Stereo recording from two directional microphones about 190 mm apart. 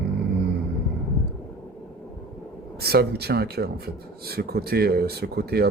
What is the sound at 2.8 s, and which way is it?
Speech, 55° right (ahead or behind).